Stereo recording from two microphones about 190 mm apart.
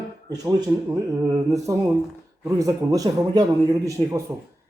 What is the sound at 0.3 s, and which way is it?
A man's voice, 20° right (ahead or behind).